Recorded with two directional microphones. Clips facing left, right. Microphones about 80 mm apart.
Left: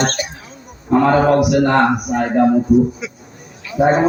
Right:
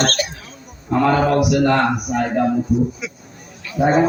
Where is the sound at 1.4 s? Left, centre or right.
Left.